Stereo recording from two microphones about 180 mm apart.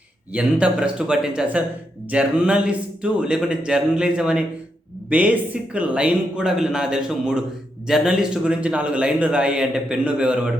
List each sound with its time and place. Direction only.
0.3 s a man's voice: 5° right (ahead or behind)